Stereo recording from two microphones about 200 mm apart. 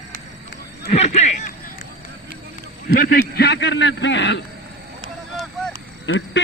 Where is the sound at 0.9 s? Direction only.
35° left (ahead or behind).